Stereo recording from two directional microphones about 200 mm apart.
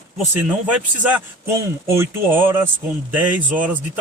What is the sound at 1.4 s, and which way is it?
Speech, 10° right (ahead or behind).